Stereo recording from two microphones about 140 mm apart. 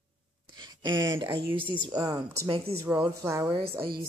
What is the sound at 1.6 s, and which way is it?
Speech, 35° right (ahead or behind).